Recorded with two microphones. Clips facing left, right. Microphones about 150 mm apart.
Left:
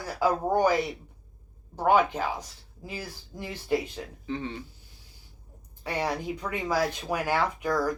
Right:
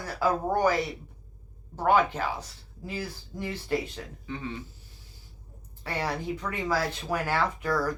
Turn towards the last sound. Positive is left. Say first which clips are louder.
# left 1 dB
turn(degrees=15)  # may be behind; listen again after turning